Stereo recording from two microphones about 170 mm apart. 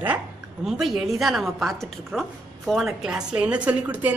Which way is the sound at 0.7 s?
Centre (ahead or behind).